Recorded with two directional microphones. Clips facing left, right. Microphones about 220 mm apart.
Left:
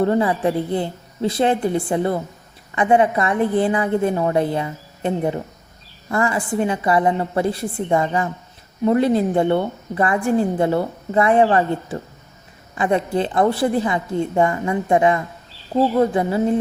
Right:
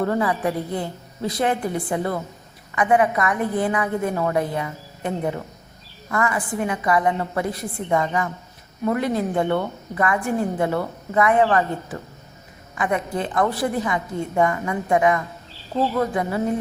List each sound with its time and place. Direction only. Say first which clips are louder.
0.0 s a woman's voice: left 4 dB; 25° left (ahead or behind)